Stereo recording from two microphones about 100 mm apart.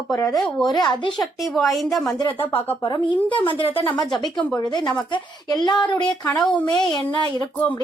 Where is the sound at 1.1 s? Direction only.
Centre (ahead or behind).